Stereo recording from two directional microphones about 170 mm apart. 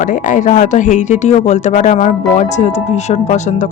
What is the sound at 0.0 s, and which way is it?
Speech, 50° left (ahead or behind).